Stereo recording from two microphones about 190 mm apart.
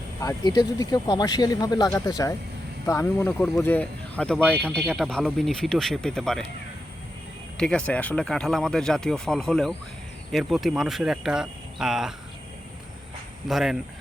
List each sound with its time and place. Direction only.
0.2 s speech: 20° left (ahead or behind); by 6.4 s 5° left (ahead or behind)
7.5 s speech: 5° left (ahead or behind)
13.5 s speech: centre (ahead or behind)